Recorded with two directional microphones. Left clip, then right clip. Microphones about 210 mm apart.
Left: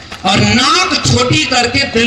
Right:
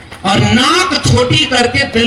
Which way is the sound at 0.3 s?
30° left (ahead or behind).